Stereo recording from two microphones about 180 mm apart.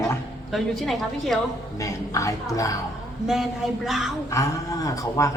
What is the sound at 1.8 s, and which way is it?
Speech, 20° left (ahead or behind).